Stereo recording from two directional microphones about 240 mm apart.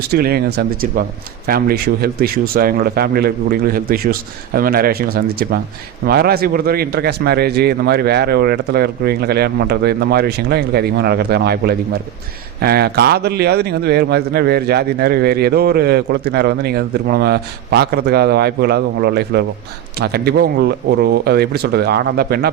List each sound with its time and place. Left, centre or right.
0.1 s a man's voice: right